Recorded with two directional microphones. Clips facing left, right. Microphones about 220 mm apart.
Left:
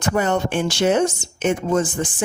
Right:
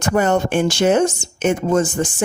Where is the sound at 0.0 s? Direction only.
45° right (ahead or behind).